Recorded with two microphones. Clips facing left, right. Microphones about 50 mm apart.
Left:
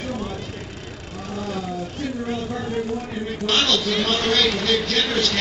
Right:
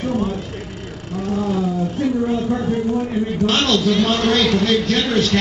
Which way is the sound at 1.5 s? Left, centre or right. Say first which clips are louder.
Right 7 dB; centre.